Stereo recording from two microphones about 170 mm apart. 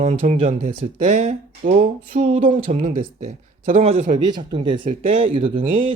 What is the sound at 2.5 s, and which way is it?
Speech, 35° right (ahead or behind).